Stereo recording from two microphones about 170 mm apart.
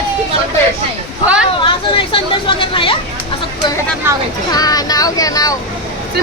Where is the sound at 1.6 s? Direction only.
30° left (ahead or behind).